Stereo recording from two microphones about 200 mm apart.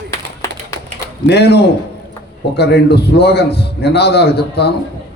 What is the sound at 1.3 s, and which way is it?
A man's voice, 55° left (ahead or behind).